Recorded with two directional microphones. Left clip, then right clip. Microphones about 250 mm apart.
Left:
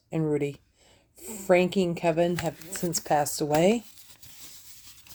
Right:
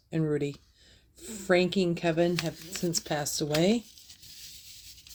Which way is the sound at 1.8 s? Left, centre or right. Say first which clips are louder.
Left 2 dB; left.